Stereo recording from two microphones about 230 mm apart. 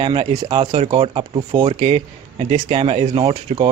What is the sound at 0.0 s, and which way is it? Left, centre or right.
Speech, right.